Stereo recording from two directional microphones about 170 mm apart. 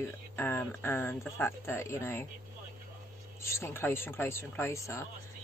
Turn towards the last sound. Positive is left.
turn(degrees=15)  # may be behind; listen again after turning